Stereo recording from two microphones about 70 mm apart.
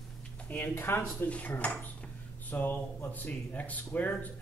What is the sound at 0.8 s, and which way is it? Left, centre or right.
Speech, left.